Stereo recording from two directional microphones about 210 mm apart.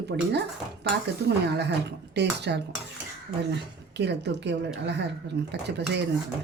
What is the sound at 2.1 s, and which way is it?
Speech, 55° right (ahead or behind).